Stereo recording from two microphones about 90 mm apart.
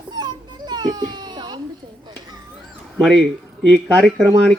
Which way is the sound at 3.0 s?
5° left (ahead or behind).